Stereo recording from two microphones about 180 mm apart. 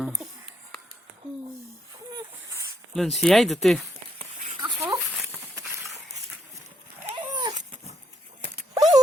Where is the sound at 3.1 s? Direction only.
Centre (ahead or behind).